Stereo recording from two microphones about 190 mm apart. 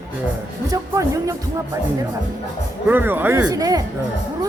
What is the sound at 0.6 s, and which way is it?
Speech, 15° right (ahead or behind).